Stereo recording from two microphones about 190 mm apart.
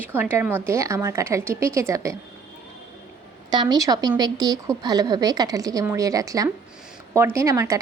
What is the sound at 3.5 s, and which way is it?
A woman's voice, 20° right (ahead or behind).